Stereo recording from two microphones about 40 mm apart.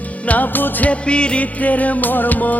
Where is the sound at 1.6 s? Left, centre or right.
Left.